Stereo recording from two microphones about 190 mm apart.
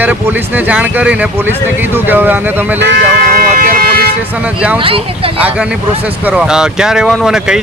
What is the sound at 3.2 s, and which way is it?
Emergency vehicle, 50° right (ahead or behind).